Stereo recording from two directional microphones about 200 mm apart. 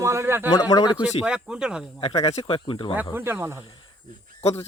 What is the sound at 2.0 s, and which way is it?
Speech, 30° left (ahead or behind).